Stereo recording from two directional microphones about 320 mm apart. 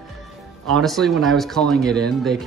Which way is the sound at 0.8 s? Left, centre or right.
Centre.